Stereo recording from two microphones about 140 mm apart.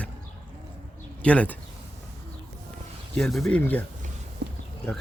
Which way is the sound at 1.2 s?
10° left (ahead or behind).